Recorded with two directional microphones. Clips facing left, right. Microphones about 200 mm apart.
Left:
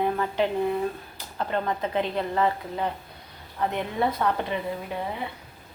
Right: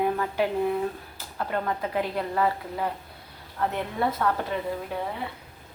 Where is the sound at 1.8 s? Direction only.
25° left (ahead or behind).